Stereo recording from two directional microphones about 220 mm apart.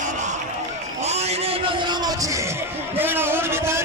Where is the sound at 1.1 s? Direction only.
30° right (ahead or behind).